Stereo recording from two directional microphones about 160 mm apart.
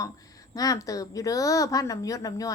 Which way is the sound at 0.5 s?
20° left (ahead or behind).